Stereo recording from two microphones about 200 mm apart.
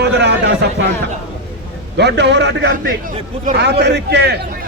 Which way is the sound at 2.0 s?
60° right (ahead or behind).